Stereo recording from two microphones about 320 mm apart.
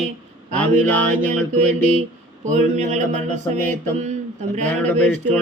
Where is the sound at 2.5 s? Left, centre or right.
Right.